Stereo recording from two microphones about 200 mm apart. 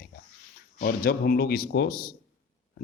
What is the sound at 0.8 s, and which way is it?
Speech, 50° left (ahead or behind).